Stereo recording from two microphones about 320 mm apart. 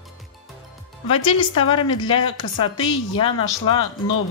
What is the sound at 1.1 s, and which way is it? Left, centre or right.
A woman's voice, centre.